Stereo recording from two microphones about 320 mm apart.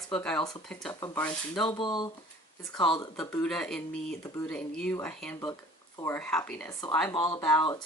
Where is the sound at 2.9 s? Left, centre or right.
Centre.